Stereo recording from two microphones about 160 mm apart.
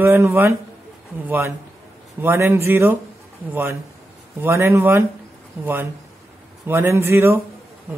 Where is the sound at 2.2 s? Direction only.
15° right (ahead or behind).